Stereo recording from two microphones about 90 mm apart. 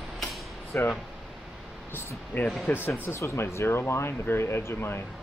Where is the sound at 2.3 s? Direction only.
20° left (ahead or behind).